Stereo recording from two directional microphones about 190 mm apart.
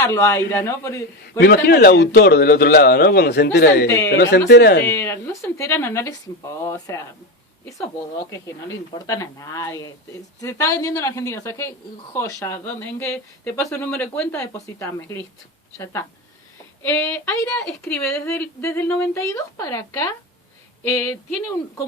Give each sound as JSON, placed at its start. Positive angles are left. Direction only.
{"t": 0.0, "sound": "speech", "side_deg": 15}
{"t": 1.4, "sound": "a man's voice", "side_deg": 60}
{"t": 3.8, "sound": "speech", "side_deg": 15}
{"t": 4.1, "sound": "a man's voice", "side_deg": 60}
{"t": 4.9, "sound": "speech", "side_deg": 10}
{"t": 8.3, "sound": "speech", "side_deg": 15}